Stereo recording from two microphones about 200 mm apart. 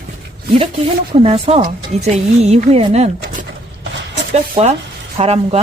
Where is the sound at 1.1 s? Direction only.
30° right (ahead or behind).